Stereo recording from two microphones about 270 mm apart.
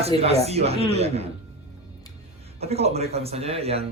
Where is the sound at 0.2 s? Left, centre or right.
Right.